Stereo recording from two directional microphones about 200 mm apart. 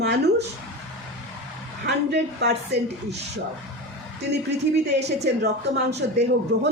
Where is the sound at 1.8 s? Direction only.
55° right (ahead or behind).